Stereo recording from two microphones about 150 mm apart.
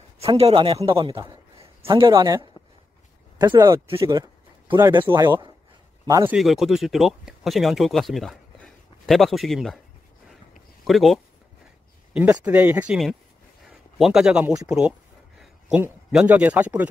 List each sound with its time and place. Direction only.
0.2 s a man's voice: 40° right (ahead or behind)
2.6 s a sound: 25° left (ahead or behind)
3.3 s speech: 25° right (ahead or behind)
5.0 s speech: 25° right (ahead or behind)
6.3 s speech: centre (ahead or behind)
10.9 s a man's voice: centre (ahead or behind)
14.7 s a sound: 5° right (ahead or behind)
16.1 s speech: 5° right (ahead or behind)